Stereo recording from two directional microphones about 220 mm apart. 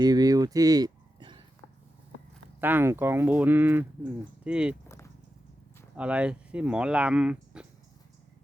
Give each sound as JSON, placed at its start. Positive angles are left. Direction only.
{"t": 0.0, "sound": "a sound", "side_deg": -15}
{"t": 2.6, "sound": "speech", "side_deg": -10}
{"t": 6.0, "sound": "speech", "side_deg": -5}